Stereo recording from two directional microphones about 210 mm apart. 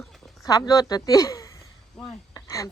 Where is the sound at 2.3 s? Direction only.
15° left (ahead or behind).